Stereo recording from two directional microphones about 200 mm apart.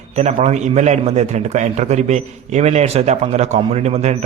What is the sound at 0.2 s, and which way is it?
A man's voice, 35° right (ahead or behind).